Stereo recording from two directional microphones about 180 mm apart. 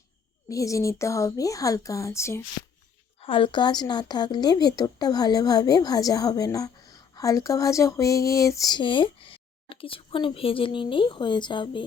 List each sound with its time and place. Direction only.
0.4 s speech: 15° left (ahead or behind)
3.2 s a woman's voice: 30° left (ahead or behind)